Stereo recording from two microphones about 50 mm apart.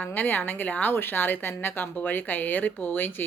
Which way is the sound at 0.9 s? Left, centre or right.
Left.